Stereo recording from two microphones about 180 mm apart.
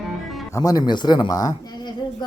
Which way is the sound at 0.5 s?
20° left (ahead or behind).